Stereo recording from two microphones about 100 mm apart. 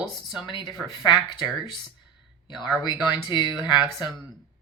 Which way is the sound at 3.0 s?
45° left (ahead or behind).